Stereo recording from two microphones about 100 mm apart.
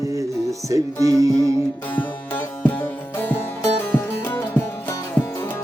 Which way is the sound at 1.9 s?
15° left (ahead or behind).